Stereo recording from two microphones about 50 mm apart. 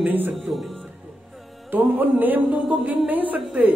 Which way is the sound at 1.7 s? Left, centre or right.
Right.